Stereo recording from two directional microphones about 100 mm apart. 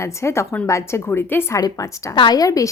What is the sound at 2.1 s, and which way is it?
Speech, 55° left (ahead or behind).